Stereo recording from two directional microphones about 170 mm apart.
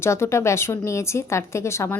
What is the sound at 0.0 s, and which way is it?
A woman's voice, 15° left (ahead or behind).